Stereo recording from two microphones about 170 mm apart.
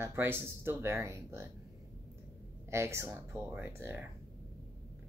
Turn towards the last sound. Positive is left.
turn(degrees=-10)  # may be behind; listen again after turning